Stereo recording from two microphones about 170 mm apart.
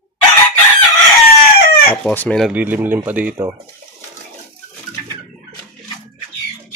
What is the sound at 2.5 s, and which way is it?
Speech, 10° right (ahead or behind).